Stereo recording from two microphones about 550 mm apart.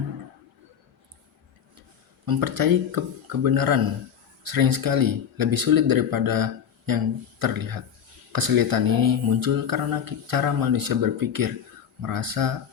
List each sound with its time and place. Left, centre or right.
2.2 s speech: right